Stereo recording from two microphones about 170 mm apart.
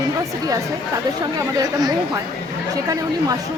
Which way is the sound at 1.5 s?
25° right (ahead or behind).